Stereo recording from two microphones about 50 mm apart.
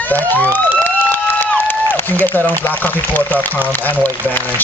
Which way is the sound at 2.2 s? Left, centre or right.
Left.